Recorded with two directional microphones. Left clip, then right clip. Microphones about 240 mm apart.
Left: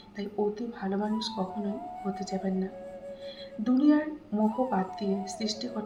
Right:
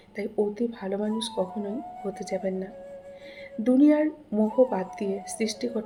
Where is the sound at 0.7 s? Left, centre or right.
Right.